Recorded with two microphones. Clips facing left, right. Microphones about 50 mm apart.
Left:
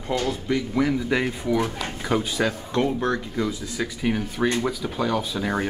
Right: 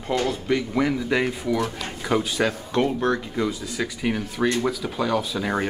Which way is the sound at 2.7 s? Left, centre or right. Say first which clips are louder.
Right 2 dB; right.